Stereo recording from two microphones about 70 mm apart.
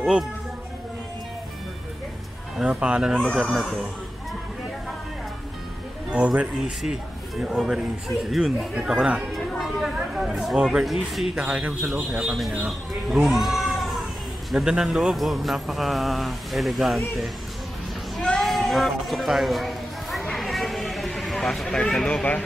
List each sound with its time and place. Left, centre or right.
0.0 s speech: centre
2.5 s speech: centre
3.3 s speech: centre
6.0 s speech: centre
6.9 s speech: centre
8.7 s speech: centre
9.3 s speech: centre
12.6 s cat: centre
14.5 s speech: centre
18.2 s a sound: centre
21.8 s speech: centre